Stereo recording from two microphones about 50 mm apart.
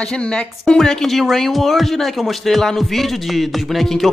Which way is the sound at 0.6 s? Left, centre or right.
Centre.